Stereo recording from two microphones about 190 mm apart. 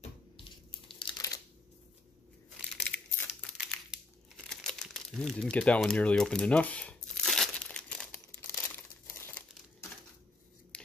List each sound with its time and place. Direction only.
0.4 s crumpling: 25° left (ahead or behind)
2.7 s crumpling: centre (ahead or behind)